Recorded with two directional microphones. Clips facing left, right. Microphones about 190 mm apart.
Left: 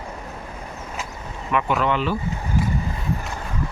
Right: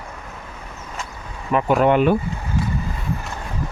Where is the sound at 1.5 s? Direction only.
40° right (ahead or behind).